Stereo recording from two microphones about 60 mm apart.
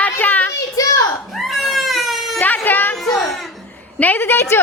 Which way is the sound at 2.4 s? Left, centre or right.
Left.